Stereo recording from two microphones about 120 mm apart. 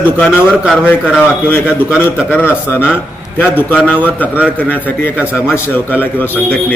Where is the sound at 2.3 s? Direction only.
15° left (ahead or behind).